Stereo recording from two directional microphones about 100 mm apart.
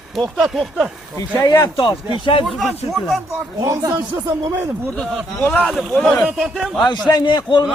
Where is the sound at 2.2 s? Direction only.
60° left (ahead or behind).